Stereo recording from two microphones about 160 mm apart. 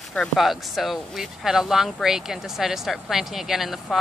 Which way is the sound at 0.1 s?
Centre (ahead or behind).